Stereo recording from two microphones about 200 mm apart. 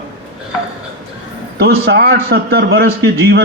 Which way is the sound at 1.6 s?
55° right (ahead or behind).